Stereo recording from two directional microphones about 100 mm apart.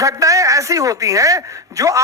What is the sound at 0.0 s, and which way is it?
A woman's voice, 35° right (ahead or behind).